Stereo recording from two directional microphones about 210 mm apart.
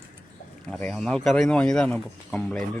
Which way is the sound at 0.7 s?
5° left (ahead or behind).